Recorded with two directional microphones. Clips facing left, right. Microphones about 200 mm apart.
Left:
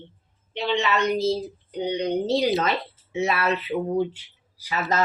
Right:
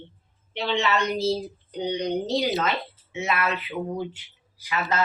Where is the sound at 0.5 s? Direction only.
15° left (ahead or behind).